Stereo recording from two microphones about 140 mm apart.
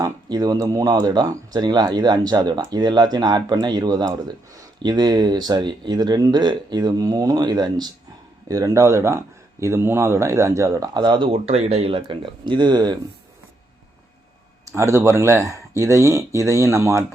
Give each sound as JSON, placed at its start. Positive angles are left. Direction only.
{"t": 0.0, "sound": "speech", "side_deg": -25}
{"t": 14.8, "sound": "speech", "side_deg": -20}